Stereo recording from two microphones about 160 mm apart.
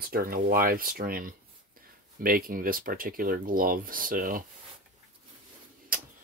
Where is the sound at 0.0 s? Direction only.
65° right (ahead or behind).